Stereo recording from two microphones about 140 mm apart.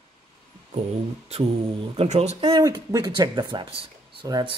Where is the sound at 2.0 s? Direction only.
50° right (ahead or behind).